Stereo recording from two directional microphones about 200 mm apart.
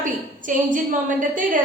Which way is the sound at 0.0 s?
40° right (ahead or behind).